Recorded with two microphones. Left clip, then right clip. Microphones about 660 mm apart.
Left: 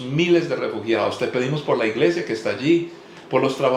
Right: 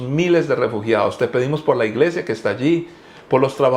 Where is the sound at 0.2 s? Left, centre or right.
Right.